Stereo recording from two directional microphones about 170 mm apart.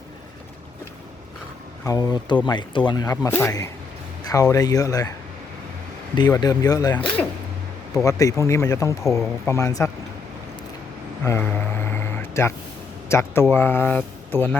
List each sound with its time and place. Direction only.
1.8 s speech: 20° left (ahead or behind)
4.2 s a sound: 20° left (ahead or behind)
4.5 s speech: 20° left (ahead or behind)
6.1 s speech: 25° left (ahead or behind)
6.9 s speech: 10° left (ahead or behind)
7.9 s speech: 20° left (ahead or behind)
11.2 s a sound: 15° left (ahead or behind)
13.1 s speech: 15° left (ahead or behind)